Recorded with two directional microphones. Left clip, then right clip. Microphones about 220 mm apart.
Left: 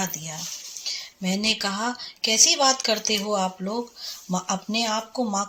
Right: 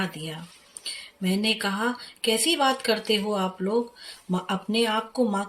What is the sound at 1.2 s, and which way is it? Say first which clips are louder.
Speech: left 1 dB; 20° left (ahead or behind).